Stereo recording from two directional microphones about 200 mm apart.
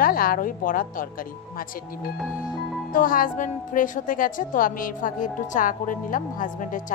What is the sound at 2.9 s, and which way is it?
A woman's voice, 45° left (ahead or behind).